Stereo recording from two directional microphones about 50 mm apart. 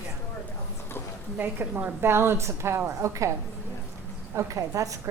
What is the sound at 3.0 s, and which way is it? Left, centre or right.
Speech, right.